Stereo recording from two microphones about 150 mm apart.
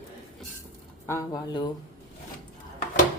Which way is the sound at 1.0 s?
20° left (ahead or behind).